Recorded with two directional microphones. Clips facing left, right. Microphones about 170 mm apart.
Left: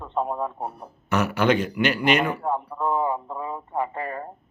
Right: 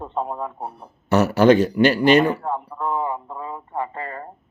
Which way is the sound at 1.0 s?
35° right (ahead or behind).